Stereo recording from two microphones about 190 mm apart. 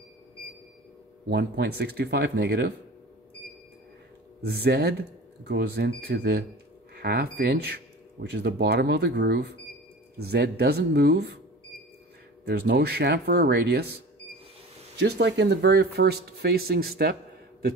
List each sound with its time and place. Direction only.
1.3 s speech: 60° right (ahead or behind)
4.4 s speech: 60° right (ahead or behind)
12.4 s speech: 60° right (ahead or behind)
15.0 s speech: 60° right (ahead or behind)